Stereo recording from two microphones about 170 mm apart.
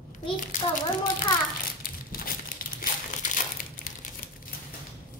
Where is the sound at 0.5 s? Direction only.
50° left (ahead or behind).